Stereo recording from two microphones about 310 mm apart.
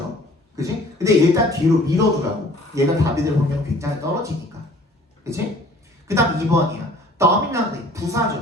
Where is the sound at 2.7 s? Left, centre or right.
Centre.